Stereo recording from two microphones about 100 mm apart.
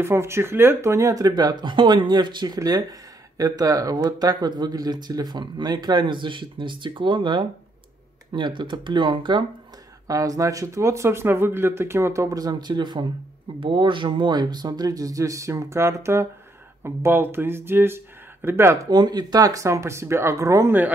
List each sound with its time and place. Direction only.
0.0 s speech: 25° right (ahead or behind); by 9.4 s 55° right (ahead or behind)
10.0 s speech: 35° right (ahead or behind)
13.6 s speech: 60° right (ahead or behind); by 18.8 s 25° right (ahead or behind)
18.9 s speech: 45° right (ahead or behind)